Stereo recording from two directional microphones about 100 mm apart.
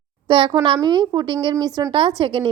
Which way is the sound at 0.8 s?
45° right (ahead or behind).